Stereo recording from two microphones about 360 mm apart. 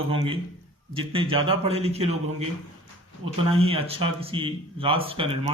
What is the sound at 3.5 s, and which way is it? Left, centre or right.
Speech, centre.